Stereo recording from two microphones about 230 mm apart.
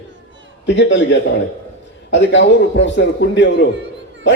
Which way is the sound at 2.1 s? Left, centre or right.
Left.